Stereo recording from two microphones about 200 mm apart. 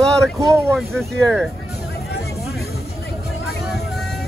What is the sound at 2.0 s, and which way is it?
Vehicle, 55° left (ahead or behind).